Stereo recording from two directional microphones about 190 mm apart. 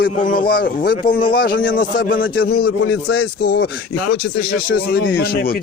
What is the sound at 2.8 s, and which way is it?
Speech, 90° left.